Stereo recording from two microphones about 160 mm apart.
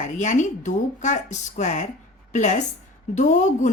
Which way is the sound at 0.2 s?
50° left (ahead or behind).